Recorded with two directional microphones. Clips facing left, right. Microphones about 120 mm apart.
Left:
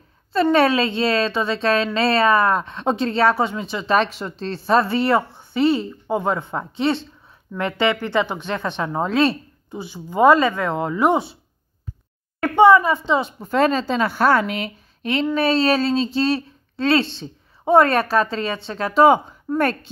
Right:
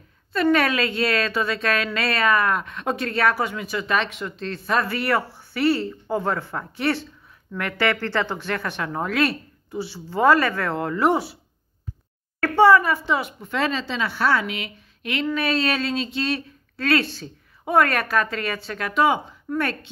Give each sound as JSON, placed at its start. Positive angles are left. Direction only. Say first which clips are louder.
{"t": 0.3, "sound": "speech", "louder": "left 4 dB", "side_deg": 30}
{"t": 12.4, "sound": "speech", "louder": "left 3 dB", "side_deg": 20}
{"t": 13.4, "sound": "a woman's voice", "louder": "left 6 dB", "side_deg": 40}
{"t": 19.5, "sound": "a woman's voice", "louder": "left 5 dB", "side_deg": 45}